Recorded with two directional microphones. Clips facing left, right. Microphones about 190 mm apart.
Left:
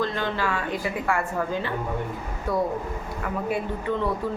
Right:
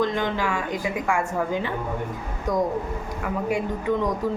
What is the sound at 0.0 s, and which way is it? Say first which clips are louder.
A woman's voice: right 2 dB; 15° right (ahead or behind).